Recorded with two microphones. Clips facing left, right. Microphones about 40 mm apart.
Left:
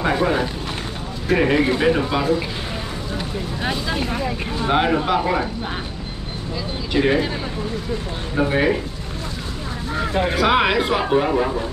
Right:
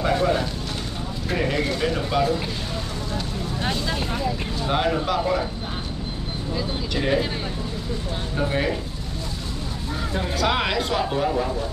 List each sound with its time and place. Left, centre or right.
0.0 s vehicle: centre
1.3 s speech: left
3.6 s speech: centre
4.2 s speech: left
4.6 s speech: left
6.9 s speech: left
8.4 s speech: left
9.9 s a sound: left
10.3 s speech: centre